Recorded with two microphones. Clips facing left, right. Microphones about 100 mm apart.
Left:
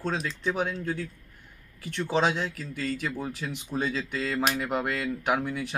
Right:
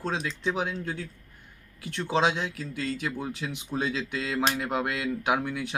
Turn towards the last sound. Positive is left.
turn(degrees=-5)  # may be behind; listen again after turning